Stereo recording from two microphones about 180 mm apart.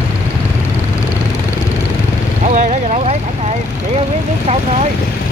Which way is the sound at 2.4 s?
40° right (ahead or behind).